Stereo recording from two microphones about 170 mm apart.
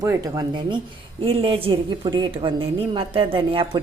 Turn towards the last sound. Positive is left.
turn(degrees=-30)  # may be behind; listen again after turning